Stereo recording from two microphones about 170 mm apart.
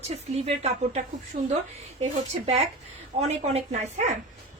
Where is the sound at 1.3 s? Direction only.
60° right (ahead or behind).